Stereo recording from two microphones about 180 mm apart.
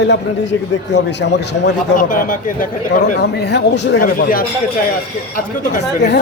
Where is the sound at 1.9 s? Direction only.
50° left (ahead or behind).